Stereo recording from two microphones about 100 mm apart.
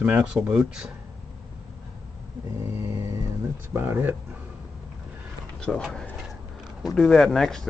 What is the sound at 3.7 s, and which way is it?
Speech, 20° right (ahead or behind).